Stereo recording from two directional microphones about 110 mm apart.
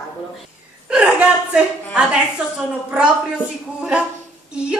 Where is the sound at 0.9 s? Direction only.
10° right (ahead or behind).